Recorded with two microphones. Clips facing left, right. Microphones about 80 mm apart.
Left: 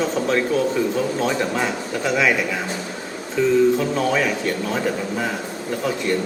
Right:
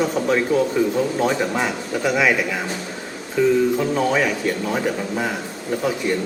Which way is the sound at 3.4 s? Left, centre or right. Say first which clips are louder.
Left 1 dB; centre.